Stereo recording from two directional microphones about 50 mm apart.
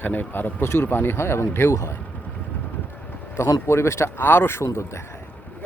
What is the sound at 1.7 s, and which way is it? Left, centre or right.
Speech, left.